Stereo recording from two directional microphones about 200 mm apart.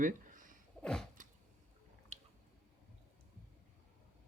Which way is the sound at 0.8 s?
5° left (ahead or behind).